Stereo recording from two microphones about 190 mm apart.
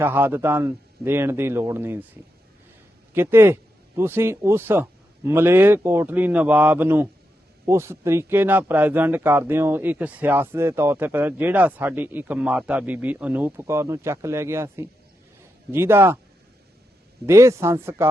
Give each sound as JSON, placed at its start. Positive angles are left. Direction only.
{"t": 0.0, "sound": "speech", "side_deg": -10}
{"t": 3.2, "sound": "speech", "side_deg": -10}
{"t": 17.2, "sound": "speech", "side_deg": -15}